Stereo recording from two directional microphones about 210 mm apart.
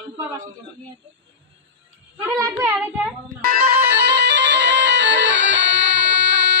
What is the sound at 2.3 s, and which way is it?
Child singing, 15° right (ahead or behind).